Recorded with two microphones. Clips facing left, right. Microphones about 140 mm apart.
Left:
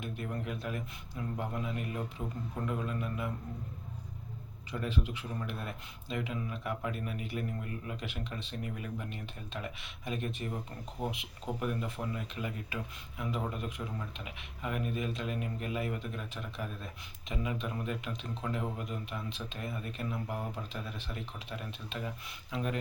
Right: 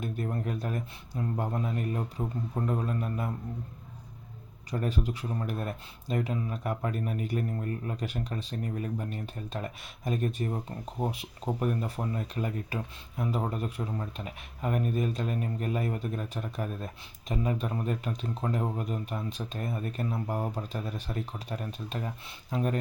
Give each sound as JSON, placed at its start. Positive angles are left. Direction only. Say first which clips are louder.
{"t": 0.0, "sound": "speech", "louder": "right 5 dB", "side_deg": -40}
{"t": 4.7, "sound": "speech", "louder": "right 4 dB", "side_deg": -40}